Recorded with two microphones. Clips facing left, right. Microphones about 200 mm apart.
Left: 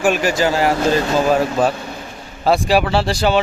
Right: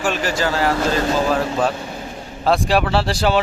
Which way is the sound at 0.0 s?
10° left (ahead or behind).